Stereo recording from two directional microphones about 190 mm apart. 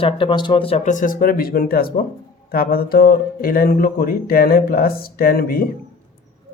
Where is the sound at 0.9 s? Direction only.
45° left (ahead or behind).